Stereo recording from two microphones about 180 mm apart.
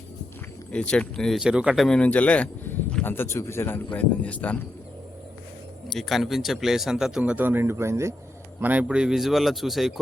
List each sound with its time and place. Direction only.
0.7 s speech: 5° left (ahead or behind)
5.9 s speech: centre (ahead or behind)